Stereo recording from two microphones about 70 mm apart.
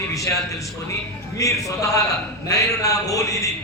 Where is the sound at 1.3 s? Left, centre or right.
Left.